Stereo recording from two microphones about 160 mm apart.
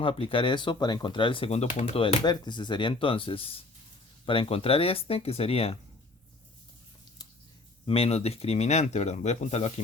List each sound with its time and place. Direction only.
0.0 s speech: 35° left (ahead or behind)
2.2 s speech: 25° left (ahead or behind)
7.9 s speech: 40° left (ahead or behind)